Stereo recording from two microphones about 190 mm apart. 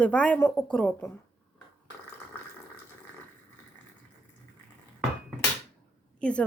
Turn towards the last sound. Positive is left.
turn(degrees=5)  # may be behind; listen again after turning